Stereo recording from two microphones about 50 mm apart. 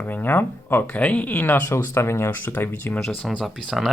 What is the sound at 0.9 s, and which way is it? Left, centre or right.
Speech, left.